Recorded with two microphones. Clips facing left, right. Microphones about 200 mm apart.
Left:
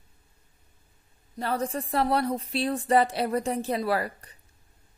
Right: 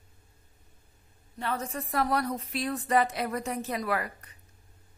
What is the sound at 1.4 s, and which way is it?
A woman's voice, 35° left (ahead or behind).